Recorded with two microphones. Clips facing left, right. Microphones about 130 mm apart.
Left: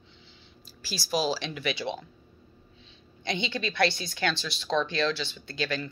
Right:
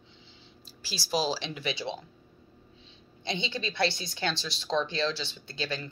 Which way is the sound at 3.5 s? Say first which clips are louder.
Left 3 dB; 30° right (ahead or behind).